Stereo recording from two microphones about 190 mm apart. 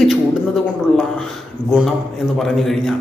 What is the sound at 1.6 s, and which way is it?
Speech, 45° right (ahead or behind).